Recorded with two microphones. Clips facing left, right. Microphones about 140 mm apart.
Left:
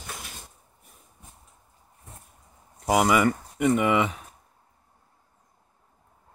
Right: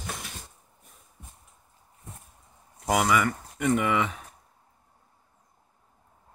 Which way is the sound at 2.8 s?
10° left (ahead or behind).